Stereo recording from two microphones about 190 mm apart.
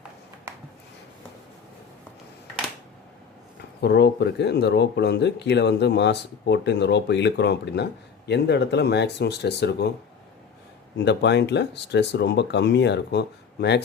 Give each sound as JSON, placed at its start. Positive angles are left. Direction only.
{"t": 3.8, "sound": "speech", "side_deg": 60}
{"t": 10.9, "sound": "speech", "side_deg": 65}